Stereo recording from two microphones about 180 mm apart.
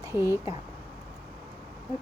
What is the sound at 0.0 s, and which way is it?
Speech, 15° right (ahead or behind).